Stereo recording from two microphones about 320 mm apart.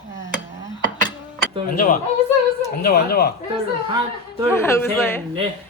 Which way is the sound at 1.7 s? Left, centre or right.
Left.